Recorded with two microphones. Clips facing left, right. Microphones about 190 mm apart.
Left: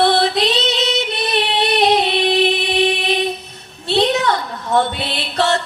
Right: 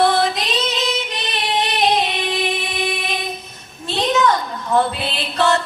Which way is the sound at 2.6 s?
75° left (ahead or behind).